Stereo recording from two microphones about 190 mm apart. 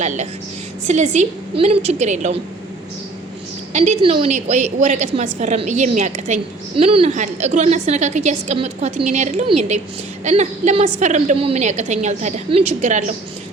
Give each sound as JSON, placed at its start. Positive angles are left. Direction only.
{"t": 0.9, "sound": "a woman's voice", "side_deg": -40}
{"t": 3.7, "sound": "a woman's voice", "side_deg": -35}